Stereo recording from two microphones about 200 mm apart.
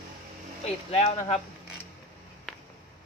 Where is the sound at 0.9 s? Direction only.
30° left (ahead or behind).